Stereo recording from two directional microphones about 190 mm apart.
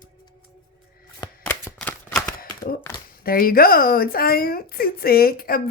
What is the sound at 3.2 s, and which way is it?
Speech, 50° left (ahead or behind).